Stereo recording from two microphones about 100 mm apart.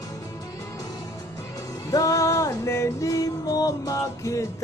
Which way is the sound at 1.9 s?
35° left (ahead or behind).